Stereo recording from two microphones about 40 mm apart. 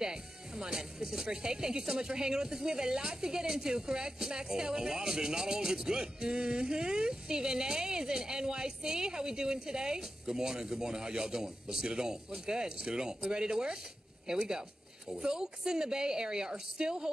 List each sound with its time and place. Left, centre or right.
0.0 s speech: centre